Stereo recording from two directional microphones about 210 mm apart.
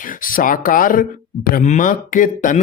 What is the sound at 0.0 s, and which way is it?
Speech, 40° left (ahead or behind).